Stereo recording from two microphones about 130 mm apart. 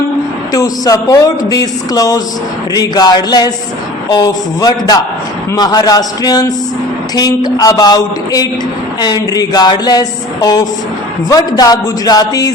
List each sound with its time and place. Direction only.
0.5 s a woman's voice: 30° left (ahead or behind)